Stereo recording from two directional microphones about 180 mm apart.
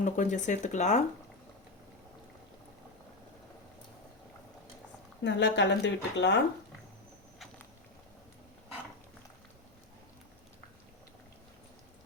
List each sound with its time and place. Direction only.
0.0 s speech: 45° left (ahead or behind)
5.2 s speech: 80° left